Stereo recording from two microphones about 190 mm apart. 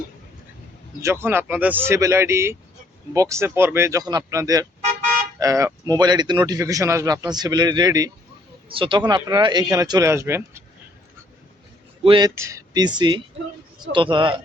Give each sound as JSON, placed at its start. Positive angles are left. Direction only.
{"t": 1.0, "sound": "speech", "side_deg": -10}
{"t": 12.0, "sound": "speech", "side_deg": -25}
{"t": 12.3, "sound": "speech", "side_deg": -15}